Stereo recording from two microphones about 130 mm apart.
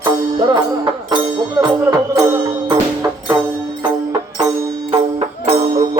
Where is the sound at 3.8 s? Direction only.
30° right (ahead or behind).